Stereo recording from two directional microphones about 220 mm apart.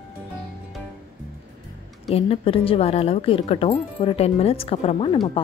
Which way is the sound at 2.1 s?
25° left (ahead or behind).